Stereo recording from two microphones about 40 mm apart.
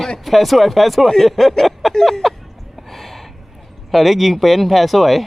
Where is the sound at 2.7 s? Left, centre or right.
Centre.